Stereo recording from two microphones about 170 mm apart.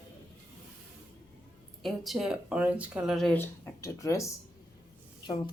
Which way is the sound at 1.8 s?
Centre (ahead or behind).